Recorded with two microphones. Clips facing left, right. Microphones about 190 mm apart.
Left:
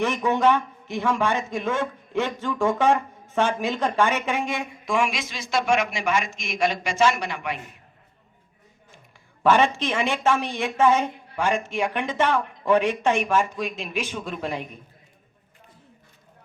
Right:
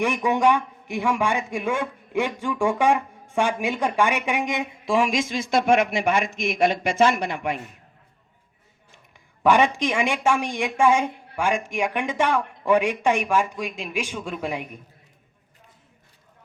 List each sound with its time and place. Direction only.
0.0 s speech: 10° right (ahead or behind)
4.9 s a man's voice: 35° right (ahead or behind)
9.4 s speech: 15° right (ahead or behind)